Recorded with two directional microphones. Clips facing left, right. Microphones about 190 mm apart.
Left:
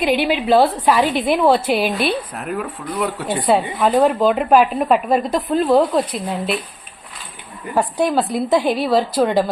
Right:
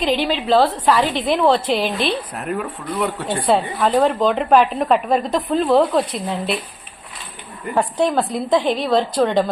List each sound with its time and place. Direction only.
0.0 s a woman's voice: 10° left (ahead or behind)
7.8 s a woman's voice: 5° left (ahead or behind)